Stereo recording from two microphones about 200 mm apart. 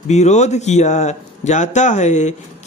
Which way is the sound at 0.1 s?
35° left (ahead or behind).